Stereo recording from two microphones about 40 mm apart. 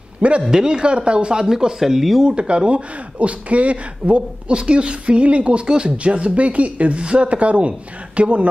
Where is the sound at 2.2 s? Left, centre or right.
Right.